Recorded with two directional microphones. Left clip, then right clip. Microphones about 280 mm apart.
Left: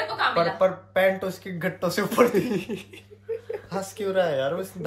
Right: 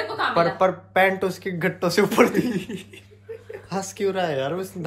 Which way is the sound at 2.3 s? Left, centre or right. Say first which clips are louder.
Even; left.